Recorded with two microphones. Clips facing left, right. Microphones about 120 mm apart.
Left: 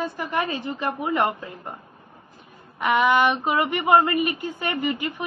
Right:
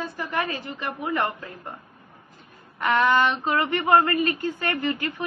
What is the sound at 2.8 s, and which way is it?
A woman's voice, 15° left (ahead or behind).